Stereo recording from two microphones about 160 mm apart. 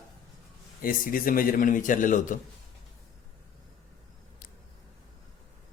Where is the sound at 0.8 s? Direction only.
65° left (ahead or behind).